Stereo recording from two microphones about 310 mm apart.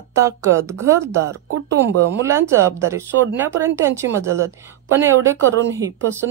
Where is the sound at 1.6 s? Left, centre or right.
Right.